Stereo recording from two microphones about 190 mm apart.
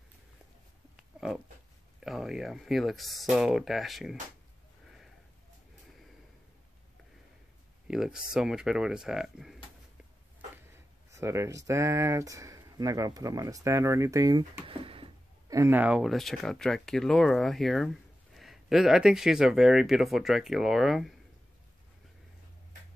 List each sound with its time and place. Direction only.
2.0 s speech: centre (ahead or behind)
4.8 s a sound: centre (ahead or behind)
7.9 s speech: 5° right (ahead or behind)
10.7 s speech: 15° right (ahead or behind)
15.5 s speech: 10° right (ahead or behind)